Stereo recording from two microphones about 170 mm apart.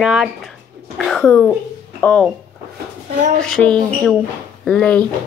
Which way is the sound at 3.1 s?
45° right (ahead or behind).